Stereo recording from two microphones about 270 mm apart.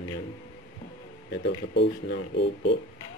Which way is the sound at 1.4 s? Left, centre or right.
Left.